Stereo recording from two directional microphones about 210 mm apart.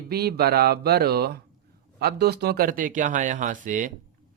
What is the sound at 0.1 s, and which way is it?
Speech, 50° right (ahead or behind).